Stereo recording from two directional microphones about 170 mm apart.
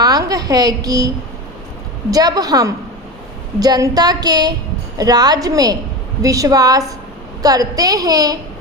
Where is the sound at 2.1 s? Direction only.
20° right (ahead or behind).